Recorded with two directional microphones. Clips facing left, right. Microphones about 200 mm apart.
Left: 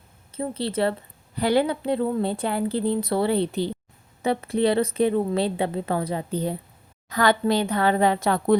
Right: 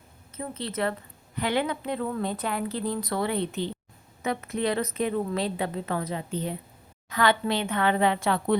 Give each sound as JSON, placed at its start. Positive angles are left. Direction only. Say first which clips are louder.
{"t": 0.3, "sound": "a woman's voice", "louder": "left 6 dB", "side_deg": 30}